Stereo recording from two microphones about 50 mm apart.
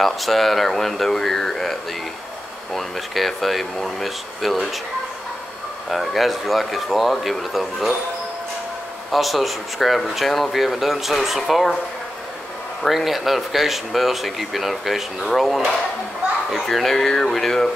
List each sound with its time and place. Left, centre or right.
0.0 s speech: centre
5.9 s speech: centre
9.1 s speech: centre
12.8 s speech: centre